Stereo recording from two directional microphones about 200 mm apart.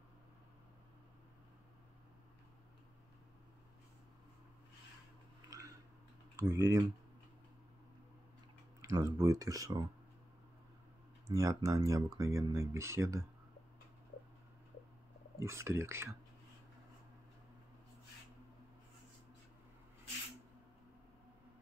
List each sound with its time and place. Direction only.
6.3 s speech: 15° right (ahead or behind)
8.8 s speech: 15° right (ahead or behind)
11.2 s speech: 15° right (ahead or behind)
15.3 s speech: 15° right (ahead or behind)